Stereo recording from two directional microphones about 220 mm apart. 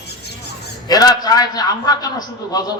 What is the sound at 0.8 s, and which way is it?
A man's voice, 15° left (ahead or behind).